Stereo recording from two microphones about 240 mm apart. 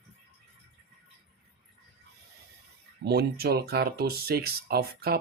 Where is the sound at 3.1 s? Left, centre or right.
Right.